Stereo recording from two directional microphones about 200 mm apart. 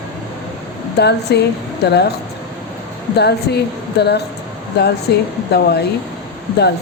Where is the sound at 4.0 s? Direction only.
55° left (ahead or behind).